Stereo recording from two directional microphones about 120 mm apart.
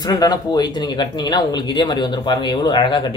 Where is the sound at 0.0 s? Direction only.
35° left (ahead or behind).